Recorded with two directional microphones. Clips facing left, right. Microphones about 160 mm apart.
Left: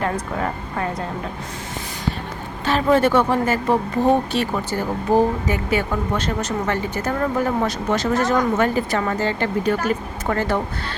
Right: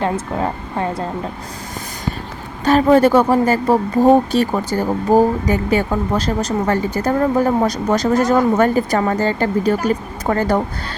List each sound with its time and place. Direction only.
0.0 s speech: 25° right (ahead or behind)
2.6 s speech: 40° right (ahead or behind)